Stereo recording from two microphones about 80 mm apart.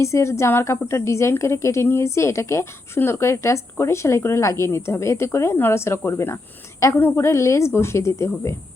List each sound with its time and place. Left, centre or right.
0.0 s a woman's voice: left